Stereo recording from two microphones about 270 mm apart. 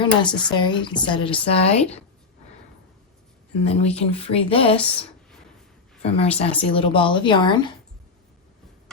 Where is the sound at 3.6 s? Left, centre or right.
Left.